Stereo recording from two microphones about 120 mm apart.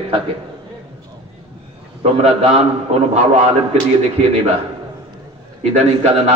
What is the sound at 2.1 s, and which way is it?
Speech, 55° right (ahead or behind).